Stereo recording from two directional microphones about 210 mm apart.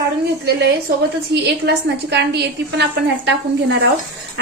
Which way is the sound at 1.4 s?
55° right (ahead or behind).